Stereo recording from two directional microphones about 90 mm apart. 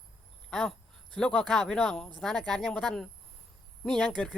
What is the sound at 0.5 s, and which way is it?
Speech, 5° left (ahead or behind).